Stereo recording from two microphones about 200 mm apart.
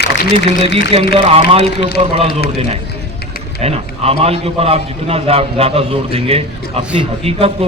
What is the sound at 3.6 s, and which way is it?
A man's voice, 30° right (ahead or behind).